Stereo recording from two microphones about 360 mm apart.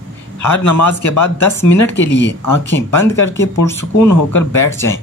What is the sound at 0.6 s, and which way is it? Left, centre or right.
Speech, left.